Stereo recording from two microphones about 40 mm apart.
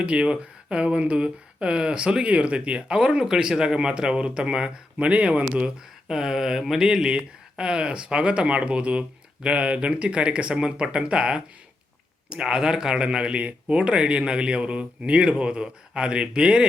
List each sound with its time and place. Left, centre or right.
0.0 s speech: right
6.1 s speech: centre